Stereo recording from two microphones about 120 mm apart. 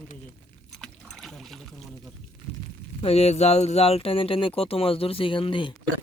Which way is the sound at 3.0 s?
55° left (ahead or behind).